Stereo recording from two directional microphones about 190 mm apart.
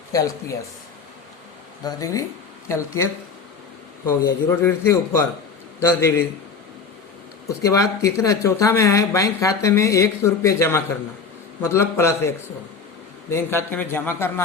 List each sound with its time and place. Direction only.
0.1 s speech: 15° left (ahead or behind)
1.8 s speech: 20° left (ahead or behind)
7.4 s speech: 15° left (ahead or behind)
13.3 s speech: 10° left (ahead or behind)